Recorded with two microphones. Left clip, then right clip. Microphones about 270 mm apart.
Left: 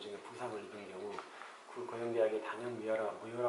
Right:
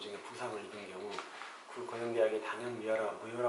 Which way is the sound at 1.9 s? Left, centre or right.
Centre.